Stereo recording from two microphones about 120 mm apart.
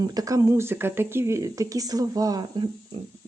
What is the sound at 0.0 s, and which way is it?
Speech, 30° right (ahead or behind).